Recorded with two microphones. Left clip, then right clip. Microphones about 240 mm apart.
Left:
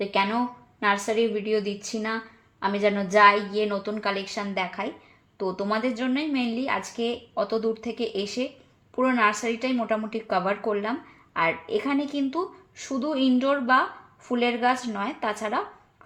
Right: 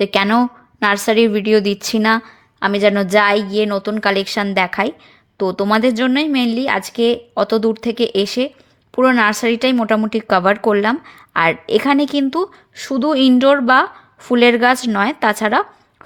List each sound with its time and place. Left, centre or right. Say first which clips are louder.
0.0 s a woman's voice: right 10 dB; right